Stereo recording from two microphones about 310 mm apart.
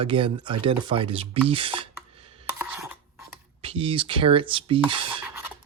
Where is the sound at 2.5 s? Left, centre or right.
Centre.